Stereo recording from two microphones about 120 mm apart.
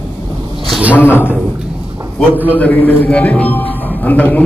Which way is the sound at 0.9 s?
15° left (ahead or behind).